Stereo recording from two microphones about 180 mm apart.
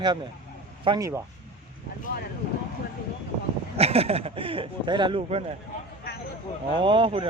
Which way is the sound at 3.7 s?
35° right (ahead or behind).